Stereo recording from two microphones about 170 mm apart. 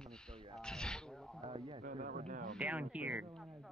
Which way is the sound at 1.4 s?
30° right (ahead or behind).